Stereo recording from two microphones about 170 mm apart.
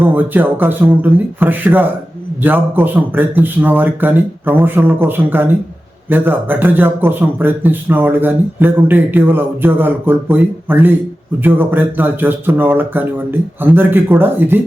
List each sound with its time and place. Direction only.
0.0 s a man's voice: 10° right (ahead or behind)